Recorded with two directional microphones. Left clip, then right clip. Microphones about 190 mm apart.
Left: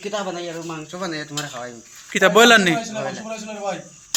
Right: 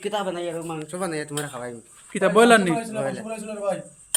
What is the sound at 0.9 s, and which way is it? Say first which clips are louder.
Cutlery: even; 45° right (ahead or behind).